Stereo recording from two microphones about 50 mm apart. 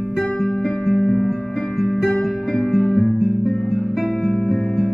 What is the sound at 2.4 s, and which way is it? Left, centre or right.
Music, centre.